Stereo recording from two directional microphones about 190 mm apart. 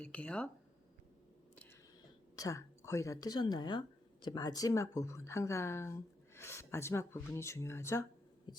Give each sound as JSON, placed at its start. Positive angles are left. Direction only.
{"t": 0.0, "sound": "speech", "side_deg": 5}
{"t": 2.3, "sound": "speech", "side_deg": 15}
{"t": 8.5, "sound": "heart sounds", "side_deg": 25}